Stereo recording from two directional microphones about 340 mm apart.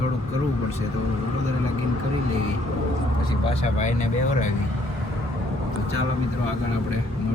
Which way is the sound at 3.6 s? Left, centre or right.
Left.